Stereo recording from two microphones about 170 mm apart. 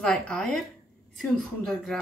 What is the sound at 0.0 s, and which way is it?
A woman's voice, 5° left (ahead or behind).